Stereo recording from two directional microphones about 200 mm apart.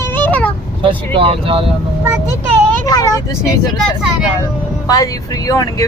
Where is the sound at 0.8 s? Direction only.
25° right (ahead or behind).